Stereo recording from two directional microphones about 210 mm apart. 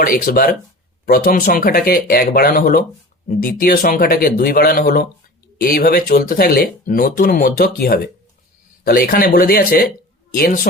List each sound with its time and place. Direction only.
0.0 s speech: 45° left (ahead or behind)